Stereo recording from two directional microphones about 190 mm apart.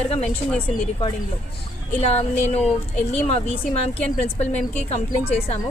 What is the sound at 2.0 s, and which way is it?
A woman's voice, 35° left (ahead or behind).